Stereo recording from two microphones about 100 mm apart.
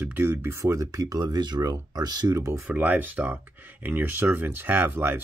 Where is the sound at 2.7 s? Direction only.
15° right (ahead or behind).